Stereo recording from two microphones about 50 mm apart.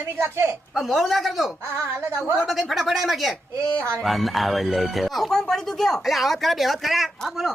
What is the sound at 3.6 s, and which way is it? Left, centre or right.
Speech, right.